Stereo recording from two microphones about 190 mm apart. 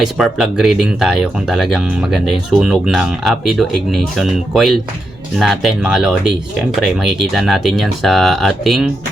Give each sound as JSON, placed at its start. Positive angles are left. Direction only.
{"t": 0.0, "sound": "speech", "side_deg": 0}